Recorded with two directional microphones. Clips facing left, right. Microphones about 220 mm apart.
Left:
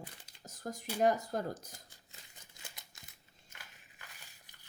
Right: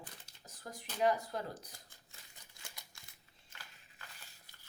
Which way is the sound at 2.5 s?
20° left (ahead or behind).